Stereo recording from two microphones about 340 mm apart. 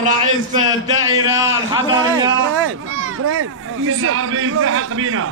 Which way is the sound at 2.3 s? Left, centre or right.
Right.